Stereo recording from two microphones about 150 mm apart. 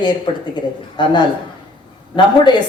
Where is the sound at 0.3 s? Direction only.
30° left (ahead or behind).